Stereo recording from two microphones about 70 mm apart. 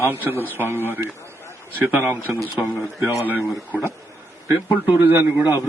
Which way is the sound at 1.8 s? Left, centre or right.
Right.